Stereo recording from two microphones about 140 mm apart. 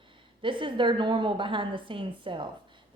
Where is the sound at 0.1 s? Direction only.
35° right (ahead or behind).